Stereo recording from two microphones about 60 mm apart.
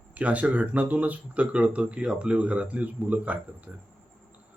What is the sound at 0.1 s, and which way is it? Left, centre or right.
Speech, right.